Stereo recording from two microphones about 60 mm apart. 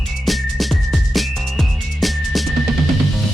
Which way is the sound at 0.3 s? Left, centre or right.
Centre.